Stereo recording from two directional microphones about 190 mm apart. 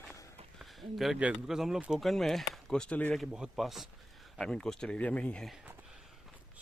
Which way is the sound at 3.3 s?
5° right (ahead or behind).